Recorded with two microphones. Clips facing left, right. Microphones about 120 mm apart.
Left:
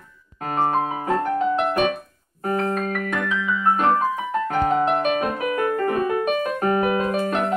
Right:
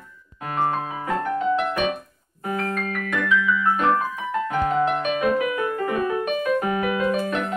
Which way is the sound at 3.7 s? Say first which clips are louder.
Left 2 dB; 35° left (ahead or behind).